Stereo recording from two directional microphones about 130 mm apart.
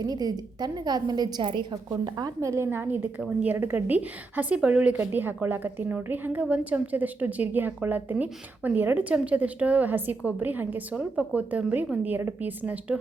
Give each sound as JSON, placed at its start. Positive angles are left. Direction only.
{"t": 0.0, "sound": "a woman's voice", "side_deg": -30}
{"t": 1.7, "sound": "a woman's voice", "side_deg": -25}